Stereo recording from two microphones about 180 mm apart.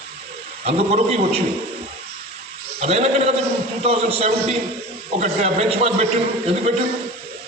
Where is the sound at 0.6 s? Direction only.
35° right (ahead or behind).